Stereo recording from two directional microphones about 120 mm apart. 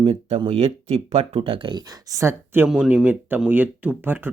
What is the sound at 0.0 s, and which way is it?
Speech, 45° right (ahead or behind).